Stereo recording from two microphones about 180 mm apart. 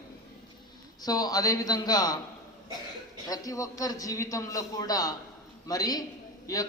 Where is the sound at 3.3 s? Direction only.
20° left (ahead or behind).